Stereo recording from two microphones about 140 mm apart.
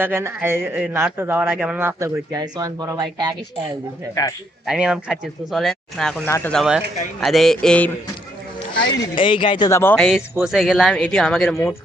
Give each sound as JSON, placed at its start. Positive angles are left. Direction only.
{"t": 0.0, "sound": "a man's voice", "side_deg": -15}
{"t": 4.1, "sound": "speech", "side_deg": 25}
{"t": 4.6, "sound": "speech", "side_deg": -5}
{"t": 6.2, "sound": "speech", "side_deg": 15}
{"t": 6.5, "sound": "speech", "side_deg": 0}
{"t": 8.8, "sound": "speech", "side_deg": 35}
{"t": 9.6, "sound": "speech", "side_deg": 15}
{"t": 10.0, "sound": "speech", "side_deg": -5}
{"t": 11.5, "sound": "speech", "side_deg": 15}